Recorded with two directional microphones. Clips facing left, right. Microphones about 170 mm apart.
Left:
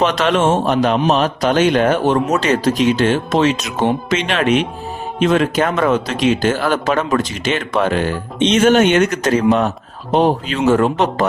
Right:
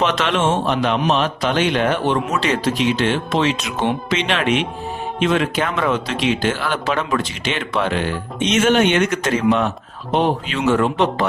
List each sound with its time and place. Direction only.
0.0 s a man's voice: 40° left (ahead or behind)
8.4 s a man's voice: 30° left (ahead or behind)